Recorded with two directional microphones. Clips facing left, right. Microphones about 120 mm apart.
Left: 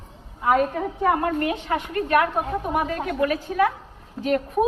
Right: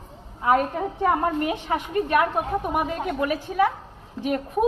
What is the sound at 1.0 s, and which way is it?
A woman's voice, 15° right (ahead or behind).